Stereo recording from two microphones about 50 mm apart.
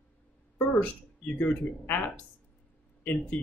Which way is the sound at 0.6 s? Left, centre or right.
Left.